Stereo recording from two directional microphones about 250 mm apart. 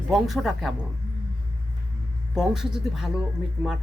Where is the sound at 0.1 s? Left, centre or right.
Centre.